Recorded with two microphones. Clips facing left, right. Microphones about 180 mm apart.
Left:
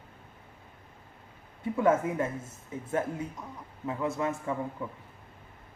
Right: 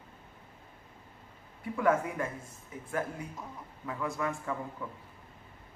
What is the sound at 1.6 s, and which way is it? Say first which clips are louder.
Speech: left 3 dB; 25° left (ahead or behind).